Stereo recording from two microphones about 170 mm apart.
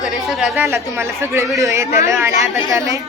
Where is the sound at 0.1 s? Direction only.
Centre (ahead or behind).